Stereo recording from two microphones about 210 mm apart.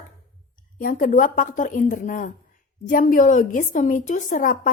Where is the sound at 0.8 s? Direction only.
40° left (ahead or behind).